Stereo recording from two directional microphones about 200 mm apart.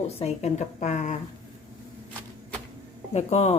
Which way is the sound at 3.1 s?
35° left (ahead or behind).